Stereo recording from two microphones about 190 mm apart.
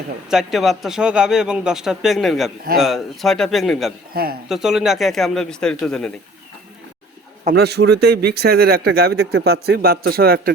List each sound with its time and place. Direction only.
0.3 s a man's voice: centre (ahead or behind)
4.1 s a man's voice: 55° right (ahead or behind)
4.4 s a man's voice: centre (ahead or behind)
7.5 s speech: 60° right (ahead or behind)